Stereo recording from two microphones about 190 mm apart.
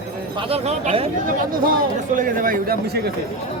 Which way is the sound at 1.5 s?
50° right (ahead or behind).